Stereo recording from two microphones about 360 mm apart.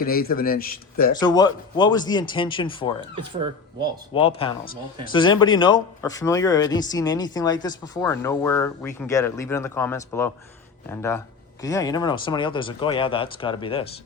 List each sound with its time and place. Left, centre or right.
0.0 s a man's voice: left
1.1 s speech: centre
3.2 s speech: centre
4.1 s speech: centre
5.1 s speech: centre